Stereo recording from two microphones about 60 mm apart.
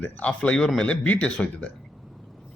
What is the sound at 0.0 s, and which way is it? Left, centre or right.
A man's voice, left.